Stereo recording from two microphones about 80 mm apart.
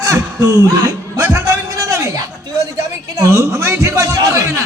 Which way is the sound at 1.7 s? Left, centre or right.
Right.